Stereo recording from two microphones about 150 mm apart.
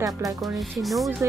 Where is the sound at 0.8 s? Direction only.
Centre (ahead or behind).